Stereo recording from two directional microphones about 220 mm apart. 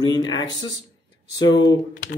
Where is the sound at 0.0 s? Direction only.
20° left (ahead or behind).